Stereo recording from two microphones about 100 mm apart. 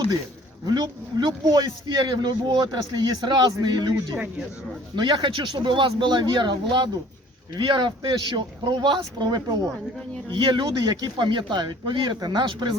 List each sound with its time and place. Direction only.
0.6 s speech: 45° right (ahead or behind)
4.9 s speech: 50° right (ahead or behind)
10.3 s speech: 50° right (ahead or behind)